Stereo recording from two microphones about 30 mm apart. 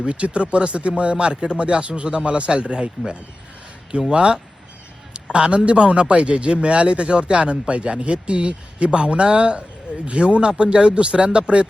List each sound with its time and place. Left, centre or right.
0.1 s a man's voice: right
4.1 s a man's voice: right